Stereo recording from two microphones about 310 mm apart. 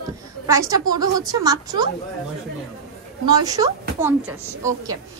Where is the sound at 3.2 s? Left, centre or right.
Centre.